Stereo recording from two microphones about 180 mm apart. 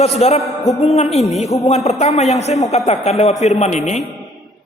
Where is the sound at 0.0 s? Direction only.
35° left (ahead or behind).